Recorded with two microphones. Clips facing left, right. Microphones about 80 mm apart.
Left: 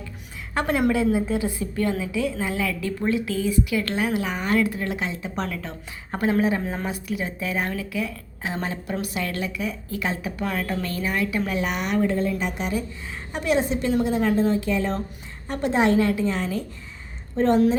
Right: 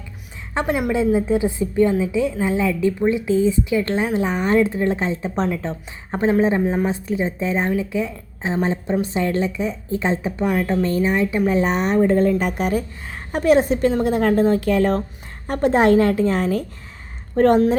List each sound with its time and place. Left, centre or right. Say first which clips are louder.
0.5 s a woman's voice: right 1 dB; centre
10.4 s a woman's voice: right 7 dB; centre; by 17.6 s right